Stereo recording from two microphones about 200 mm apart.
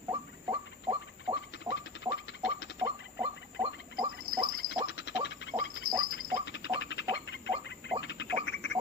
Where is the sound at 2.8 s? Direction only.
20° right (ahead or behind).